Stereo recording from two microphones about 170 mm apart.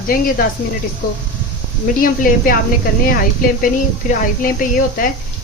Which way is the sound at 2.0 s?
55° left (ahead or behind).